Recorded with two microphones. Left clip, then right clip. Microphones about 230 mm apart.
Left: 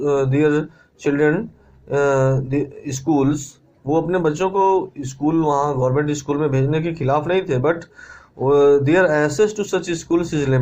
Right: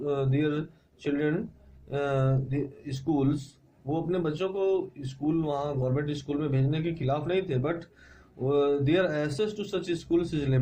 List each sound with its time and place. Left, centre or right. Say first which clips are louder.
0.0 s a man's voice: left 11 dB; left